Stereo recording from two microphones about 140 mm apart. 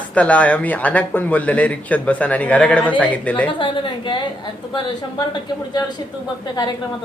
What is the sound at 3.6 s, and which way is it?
Speech, 35° left (ahead or behind).